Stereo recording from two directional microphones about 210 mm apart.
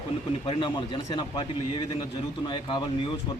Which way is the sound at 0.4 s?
25° left (ahead or behind).